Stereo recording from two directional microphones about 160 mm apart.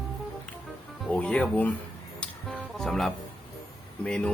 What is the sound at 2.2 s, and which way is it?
Music, 5° left (ahead or behind).